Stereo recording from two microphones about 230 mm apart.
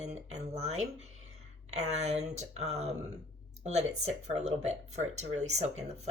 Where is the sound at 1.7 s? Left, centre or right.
Right.